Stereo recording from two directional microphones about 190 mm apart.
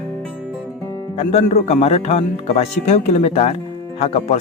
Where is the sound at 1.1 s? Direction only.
35° left (ahead or behind).